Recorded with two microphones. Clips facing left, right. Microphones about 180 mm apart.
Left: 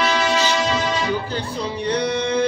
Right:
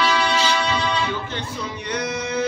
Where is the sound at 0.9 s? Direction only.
35° left (ahead or behind).